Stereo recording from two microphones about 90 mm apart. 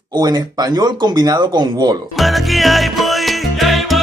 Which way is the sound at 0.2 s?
45° right (ahead or behind).